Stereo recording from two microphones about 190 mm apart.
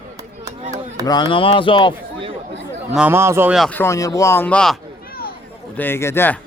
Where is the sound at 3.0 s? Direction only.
10° right (ahead or behind).